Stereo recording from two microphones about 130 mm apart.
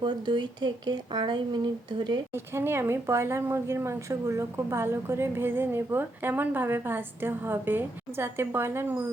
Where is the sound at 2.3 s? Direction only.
20° right (ahead or behind).